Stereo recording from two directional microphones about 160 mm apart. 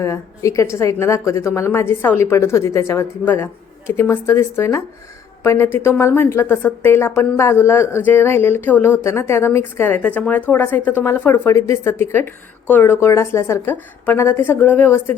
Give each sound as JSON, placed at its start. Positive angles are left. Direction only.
{"t": 0.0, "sound": "speech", "side_deg": 20}